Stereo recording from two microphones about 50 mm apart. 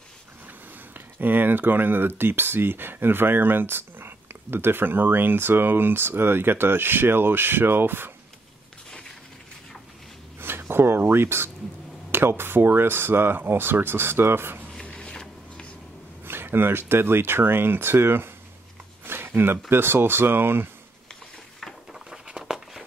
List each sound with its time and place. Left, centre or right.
0.9 s speech: right
10.6 s speech: right
14.9 s a sound: centre
16.3 s speech: right
19.0 s a sound: right
19.7 s speech: right
21.9 s walk: centre